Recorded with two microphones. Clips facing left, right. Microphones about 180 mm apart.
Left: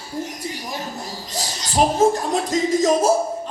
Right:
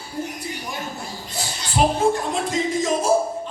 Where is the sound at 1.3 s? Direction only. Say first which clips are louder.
Left 2 dB; 40° left (ahead or behind).